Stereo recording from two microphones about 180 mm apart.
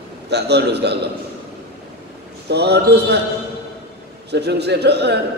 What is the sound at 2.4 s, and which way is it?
Speech, 65° right (ahead or behind).